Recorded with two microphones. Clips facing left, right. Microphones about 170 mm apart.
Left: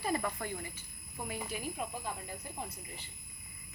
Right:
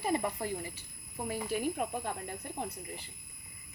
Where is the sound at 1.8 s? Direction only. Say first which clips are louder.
Right 5 dB; 55° right (ahead or behind).